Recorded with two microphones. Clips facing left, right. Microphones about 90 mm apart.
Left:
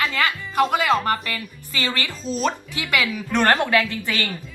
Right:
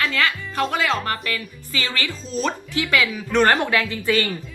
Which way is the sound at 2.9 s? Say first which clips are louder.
Right 1 dB; 20° left (ahead or behind).